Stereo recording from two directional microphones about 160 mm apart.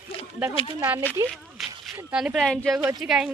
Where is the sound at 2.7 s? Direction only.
20° right (ahead or behind).